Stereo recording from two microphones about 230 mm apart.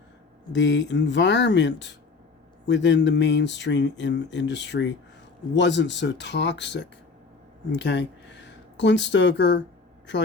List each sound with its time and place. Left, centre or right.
0.5 s speech: left